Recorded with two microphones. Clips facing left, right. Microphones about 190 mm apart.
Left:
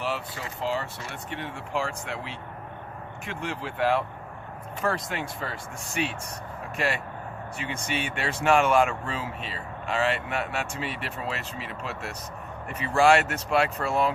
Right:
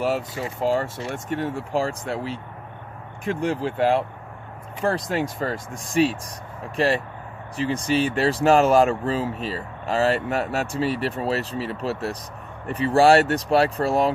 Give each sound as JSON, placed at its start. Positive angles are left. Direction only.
{"t": 0.0, "sound": "speech", "side_deg": -45}